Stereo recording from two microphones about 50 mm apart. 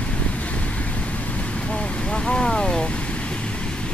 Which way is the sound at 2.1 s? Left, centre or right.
Centre.